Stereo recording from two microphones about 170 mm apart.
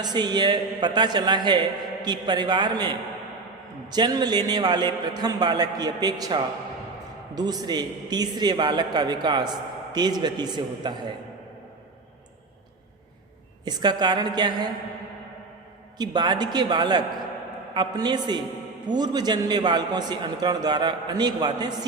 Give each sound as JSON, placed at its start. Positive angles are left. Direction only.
{"t": 0.0, "sound": "a man's voice", "side_deg": -25}
{"t": 13.7, "sound": "a man's voice", "side_deg": -25}
{"t": 16.0, "sound": "a man's voice", "side_deg": -25}